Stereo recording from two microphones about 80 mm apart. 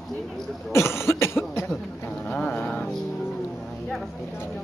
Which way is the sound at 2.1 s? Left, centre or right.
Centre.